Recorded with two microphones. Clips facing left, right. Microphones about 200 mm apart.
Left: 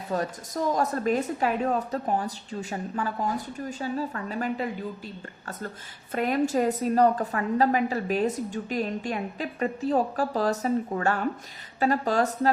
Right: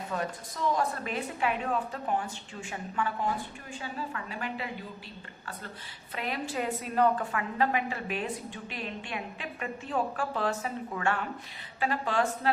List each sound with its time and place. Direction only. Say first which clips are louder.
0.1 s a woman's voice: left 7 dB; 40° left (ahead or behind)